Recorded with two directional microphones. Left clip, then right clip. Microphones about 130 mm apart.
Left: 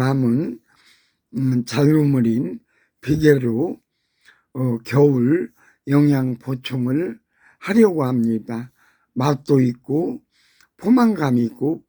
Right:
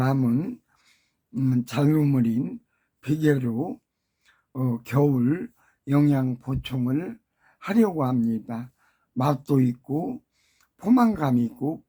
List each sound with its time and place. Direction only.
0.2 s speech: 20° left (ahead or behind)